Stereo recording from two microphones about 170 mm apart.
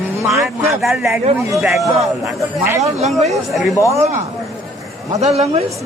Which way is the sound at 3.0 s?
40° right (ahead or behind).